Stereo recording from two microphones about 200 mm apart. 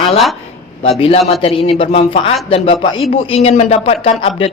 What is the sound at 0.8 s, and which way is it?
A woman's voice, 30° left (ahead or behind).